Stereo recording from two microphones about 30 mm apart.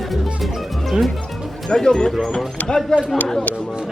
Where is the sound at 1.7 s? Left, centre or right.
Left.